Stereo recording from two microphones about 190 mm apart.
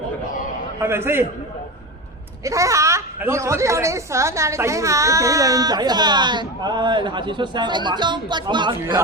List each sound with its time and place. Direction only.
0.8 s a man's voice: 10° right (ahead or behind)
2.4 s a woman's voice: 15° right (ahead or behind)